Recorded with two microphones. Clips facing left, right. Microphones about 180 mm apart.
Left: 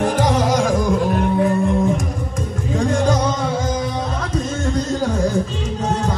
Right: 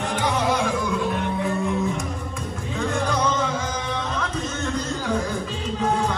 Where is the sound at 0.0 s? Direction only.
40° left (ahead or behind).